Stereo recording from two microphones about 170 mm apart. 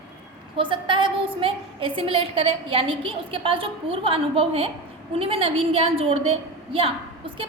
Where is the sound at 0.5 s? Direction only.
30° right (ahead or behind).